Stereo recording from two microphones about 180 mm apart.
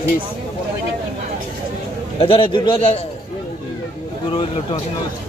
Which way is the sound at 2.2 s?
30° left (ahead or behind).